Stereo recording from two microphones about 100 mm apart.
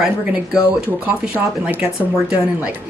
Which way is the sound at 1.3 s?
15° right (ahead or behind).